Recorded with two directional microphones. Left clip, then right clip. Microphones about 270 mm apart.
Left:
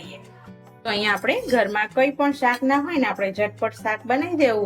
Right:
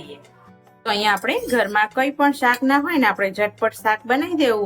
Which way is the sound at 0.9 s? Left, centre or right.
Centre.